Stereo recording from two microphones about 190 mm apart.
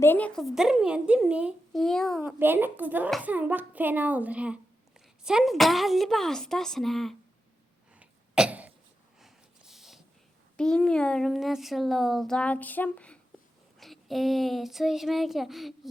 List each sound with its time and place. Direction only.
0.0 s a child's voice: 10° left (ahead or behind)
2.4 s a child's voice: 10° right (ahead or behind)
7.9 s cough: 5° right (ahead or behind)
9.2 s a sound: centre (ahead or behind)
10.6 s a child's voice: 5° left (ahead or behind)